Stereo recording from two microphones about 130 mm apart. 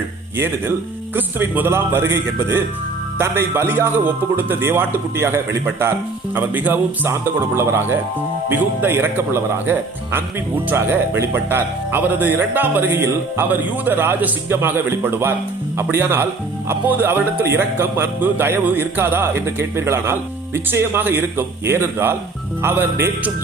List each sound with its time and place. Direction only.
0.3 s a man's voice: 20° right (ahead or behind)